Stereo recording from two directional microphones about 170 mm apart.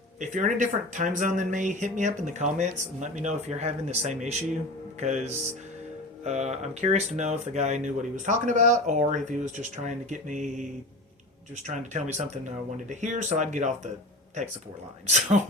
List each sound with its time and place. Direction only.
0.2 s speech: 45° right (ahead or behind)
15.1 s speech: 45° right (ahead or behind)